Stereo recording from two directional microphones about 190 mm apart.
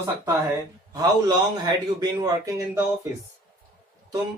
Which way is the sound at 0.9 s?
20° right (ahead or behind).